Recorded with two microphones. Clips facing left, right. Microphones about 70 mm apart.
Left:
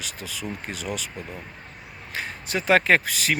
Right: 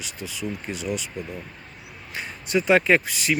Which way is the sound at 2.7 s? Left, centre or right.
Left.